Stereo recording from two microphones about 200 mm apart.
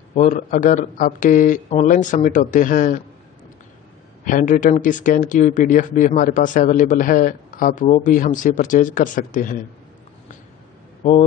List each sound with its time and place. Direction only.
0.1 s speech: 40° left (ahead or behind)
4.2 s speech: 40° left (ahead or behind)